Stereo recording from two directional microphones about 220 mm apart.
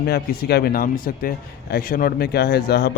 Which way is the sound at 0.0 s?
45° left (ahead or behind).